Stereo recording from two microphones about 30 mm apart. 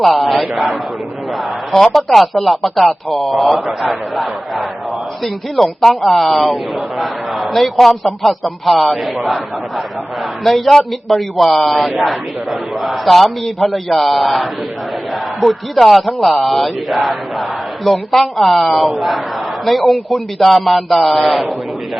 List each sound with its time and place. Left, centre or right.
0.2 s a sound: centre
1.8 s a man's voice: centre
10.7 s a man's voice: centre
11.1 s a man's voice: centre